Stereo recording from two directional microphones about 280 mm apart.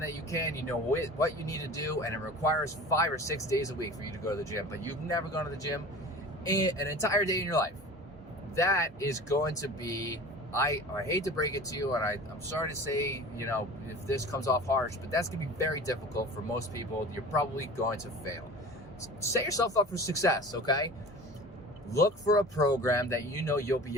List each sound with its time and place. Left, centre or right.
0.1 s speech: centre